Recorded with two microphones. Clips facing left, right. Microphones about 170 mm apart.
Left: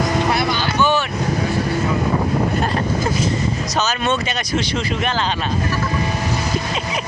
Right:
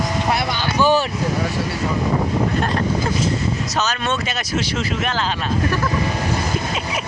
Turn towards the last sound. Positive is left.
turn(degrees=0)  # may be behind; listen again after turning